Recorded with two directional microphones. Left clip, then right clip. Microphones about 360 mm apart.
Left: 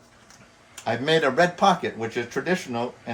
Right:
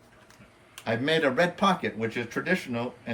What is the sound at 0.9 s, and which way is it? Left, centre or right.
Speech, centre.